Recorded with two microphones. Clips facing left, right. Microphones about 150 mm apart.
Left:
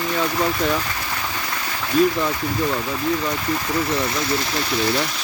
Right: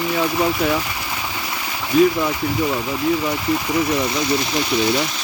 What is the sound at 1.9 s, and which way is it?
Speech, 10° right (ahead or behind).